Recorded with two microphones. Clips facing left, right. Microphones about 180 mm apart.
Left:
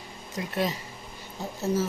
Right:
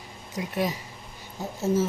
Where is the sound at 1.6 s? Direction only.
25° right (ahead or behind).